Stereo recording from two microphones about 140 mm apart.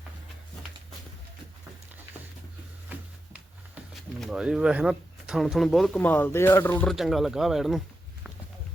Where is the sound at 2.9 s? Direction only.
10° right (ahead or behind).